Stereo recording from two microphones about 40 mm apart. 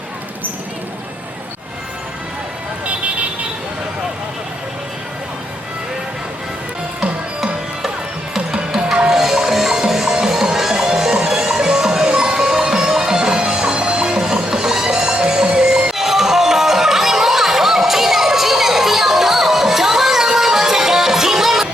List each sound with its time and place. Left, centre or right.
8.5 s music: centre
9.1 s music: centre